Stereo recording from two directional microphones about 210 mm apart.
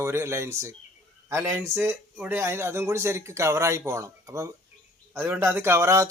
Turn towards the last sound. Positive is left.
turn(degrees=-15)  # may be behind; listen again after turning